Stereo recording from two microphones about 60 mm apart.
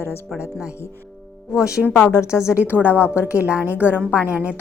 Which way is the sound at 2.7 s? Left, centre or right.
Right.